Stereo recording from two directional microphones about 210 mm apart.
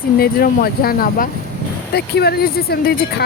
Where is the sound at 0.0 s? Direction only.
45° left (ahead or behind).